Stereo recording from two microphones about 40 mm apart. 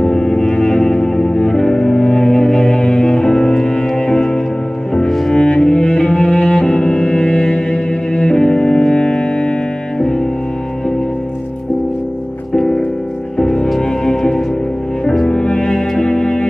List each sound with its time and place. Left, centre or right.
0.0 s music: centre
5.3 s cello: left
12.5 s music: centre